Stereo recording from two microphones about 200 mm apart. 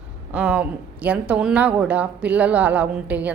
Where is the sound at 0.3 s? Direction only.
5° right (ahead or behind).